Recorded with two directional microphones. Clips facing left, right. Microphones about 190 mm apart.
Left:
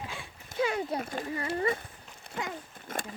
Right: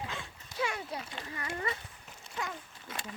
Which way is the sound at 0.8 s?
50° left (ahead or behind).